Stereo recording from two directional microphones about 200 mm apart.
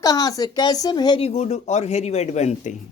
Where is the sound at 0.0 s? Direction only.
20° left (ahead or behind); by 2.7 s 35° left (ahead or behind).